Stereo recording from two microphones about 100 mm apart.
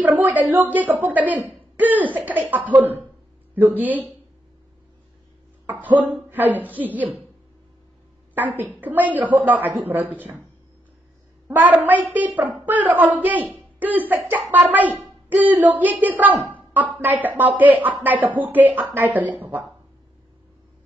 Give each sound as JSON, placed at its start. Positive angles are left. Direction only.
{"t": 0.0, "sound": "a child's voice", "side_deg": -15}
{"t": 5.7, "sound": "a child's voice", "side_deg": -15}
{"t": 8.4, "sound": "a child's voice", "side_deg": -15}
{"t": 11.4, "sound": "a child's voice", "side_deg": -20}